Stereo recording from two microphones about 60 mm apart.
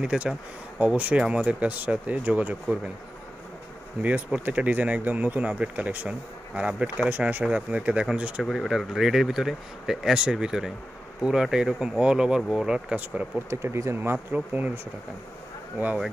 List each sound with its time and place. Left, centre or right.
0.0 s speech: centre
0.7 s speech: right
4.5 s speech: right
6.7 s speech: centre
7.1 s speech: right
8.5 s speech: centre
12.9 s speech: right
13.5 s speech: right